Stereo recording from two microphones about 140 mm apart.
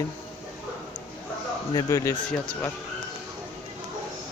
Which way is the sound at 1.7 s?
25° left (ahead or behind).